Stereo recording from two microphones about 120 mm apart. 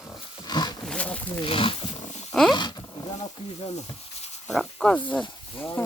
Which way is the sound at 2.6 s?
40° left (ahead or behind).